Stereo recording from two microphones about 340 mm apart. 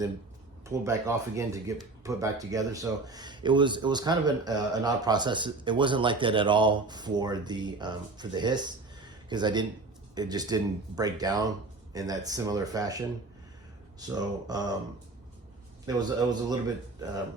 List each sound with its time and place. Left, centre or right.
0.6 s speech: centre
14.1 s speech: centre
15.9 s speech: centre